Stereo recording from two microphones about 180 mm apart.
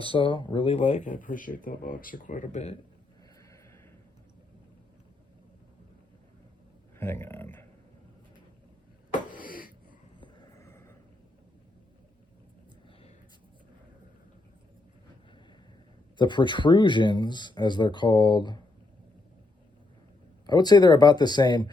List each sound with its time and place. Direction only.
0.0 s speech: 30° left (ahead or behind)
7.0 s speech: 15° left (ahead or behind)
9.4 s wheeze: 50° left (ahead or behind)
10.2 s a sound: 20° left (ahead or behind)
16.1 s speech: 25° left (ahead or behind)
20.5 s speech: 20° left (ahead or behind)